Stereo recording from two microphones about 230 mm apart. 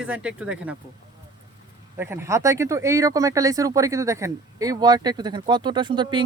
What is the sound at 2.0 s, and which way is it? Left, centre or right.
Speech, centre.